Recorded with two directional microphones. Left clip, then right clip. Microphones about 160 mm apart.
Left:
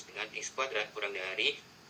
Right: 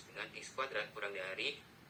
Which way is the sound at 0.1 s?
40° left (ahead or behind).